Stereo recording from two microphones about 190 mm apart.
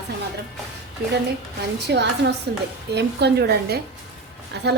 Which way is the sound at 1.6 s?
60° right (ahead or behind).